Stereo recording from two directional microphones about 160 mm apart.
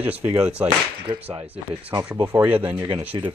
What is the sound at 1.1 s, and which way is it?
Speech, 30° right (ahead or behind).